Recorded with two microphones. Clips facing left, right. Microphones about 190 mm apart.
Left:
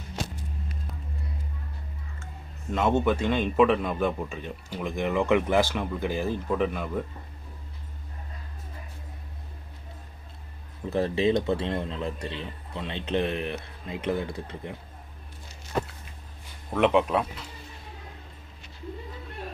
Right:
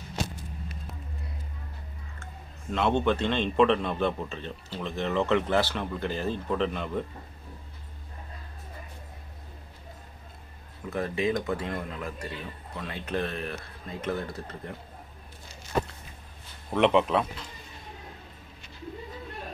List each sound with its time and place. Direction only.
2.7 s speech: 5° left (ahead or behind)
10.9 s a man's voice: 30° left (ahead or behind); by 14.8 s 10° left (ahead or behind)
16.7 s speech: 5° left (ahead or behind)